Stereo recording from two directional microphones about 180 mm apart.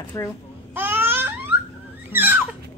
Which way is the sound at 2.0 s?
10° right (ahead or behind).